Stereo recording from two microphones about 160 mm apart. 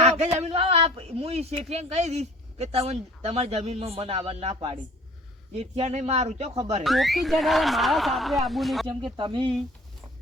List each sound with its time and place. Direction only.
0.0 s speech: 45° right (ahead or behind)
6.8 s speech: centre (ahead or behind)
9.1 s speech: 30° right (ahead or behind)